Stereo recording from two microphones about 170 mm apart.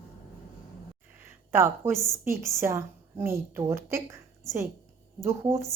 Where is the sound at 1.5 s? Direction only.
15° right (ahead or behind).